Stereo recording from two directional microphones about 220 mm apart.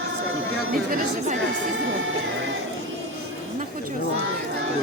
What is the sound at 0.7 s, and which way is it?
Speech, 40° right (ahead or behind).